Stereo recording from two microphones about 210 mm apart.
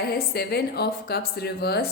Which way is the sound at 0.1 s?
50° left (ahead or behind).